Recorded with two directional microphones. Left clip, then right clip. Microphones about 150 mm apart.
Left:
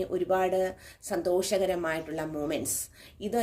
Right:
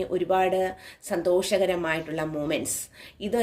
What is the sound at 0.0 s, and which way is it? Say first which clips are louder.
Speech: right 4 dB; 20° right (ahead or behind).